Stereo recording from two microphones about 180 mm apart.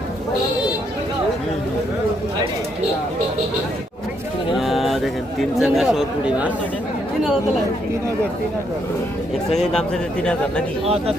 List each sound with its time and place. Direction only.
4.5 s a sound: centre (ahead or behind)
9.5 s speech: 5° left (ahead or behind)
10.8 s speech: 35° right (ahead or behind)